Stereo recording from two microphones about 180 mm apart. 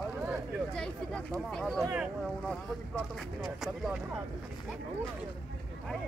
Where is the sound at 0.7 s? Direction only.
5° left (ahead or behind).